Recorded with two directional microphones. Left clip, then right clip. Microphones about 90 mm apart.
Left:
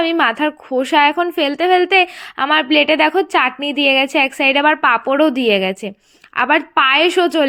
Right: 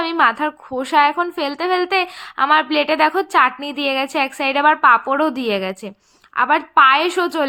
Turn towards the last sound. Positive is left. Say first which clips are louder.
# left 4 dB
turn(degrees=30)  # may be behind; listen again after turning